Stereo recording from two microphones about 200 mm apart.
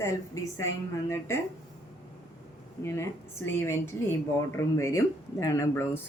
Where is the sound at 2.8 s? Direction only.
15° left (ahead or behind).